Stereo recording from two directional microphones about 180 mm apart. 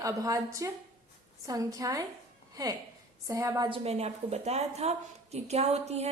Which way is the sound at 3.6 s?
30° right (ahead or behind).